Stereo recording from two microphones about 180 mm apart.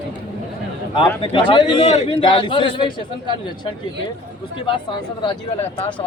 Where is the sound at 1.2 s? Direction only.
30° left (ahead or behind).